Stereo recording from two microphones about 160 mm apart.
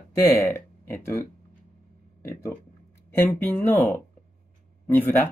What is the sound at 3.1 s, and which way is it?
Speech, 10° left (ahead or behind).